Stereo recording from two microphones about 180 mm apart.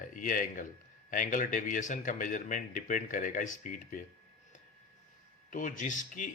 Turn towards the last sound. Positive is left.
turn(degrees=45)  # may be behind; listen again after turning